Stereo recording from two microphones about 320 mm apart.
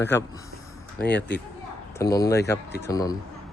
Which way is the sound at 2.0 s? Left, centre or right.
Centre.